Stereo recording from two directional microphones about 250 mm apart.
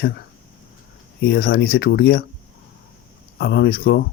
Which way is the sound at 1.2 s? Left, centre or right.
Left.